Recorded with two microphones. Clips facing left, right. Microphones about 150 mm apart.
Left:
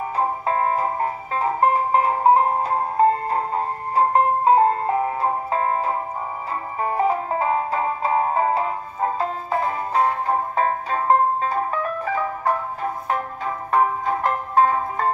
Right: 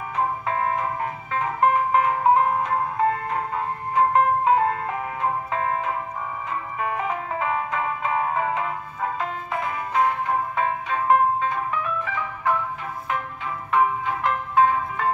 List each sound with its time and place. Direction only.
0.2 s music: 35° left (ahead or behind)